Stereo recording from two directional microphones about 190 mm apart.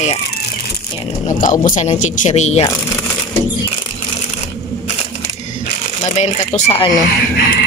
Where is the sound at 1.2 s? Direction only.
45° left (ahead or behind).